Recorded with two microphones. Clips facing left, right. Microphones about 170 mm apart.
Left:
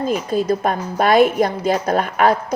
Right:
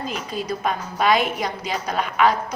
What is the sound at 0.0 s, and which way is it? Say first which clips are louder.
A woman's voice: left 9 dB; 50° left (ahead or behind).